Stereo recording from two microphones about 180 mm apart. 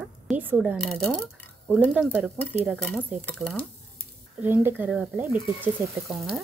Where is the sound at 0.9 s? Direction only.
Centre (ahead or behind).